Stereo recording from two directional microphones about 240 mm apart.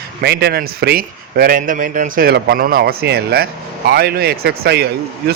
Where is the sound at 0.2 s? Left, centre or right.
Right.